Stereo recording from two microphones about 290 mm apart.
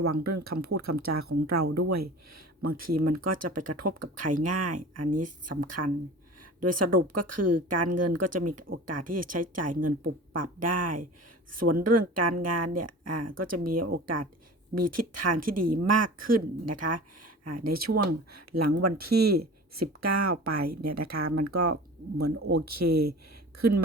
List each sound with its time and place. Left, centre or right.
0.2 s speech: right
15.6 s speech: right
16.1 s speech: right